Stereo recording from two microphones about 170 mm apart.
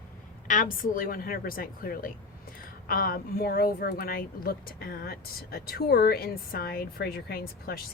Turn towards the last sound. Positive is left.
turn(degrees=65)  # may be behind; listen again after turning